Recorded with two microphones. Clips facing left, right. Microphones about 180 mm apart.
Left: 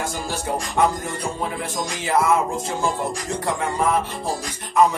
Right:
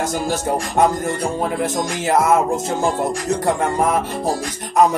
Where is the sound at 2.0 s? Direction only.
45° right (ahead or behind).